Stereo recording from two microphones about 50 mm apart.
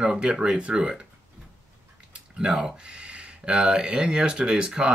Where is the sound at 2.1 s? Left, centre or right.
Right.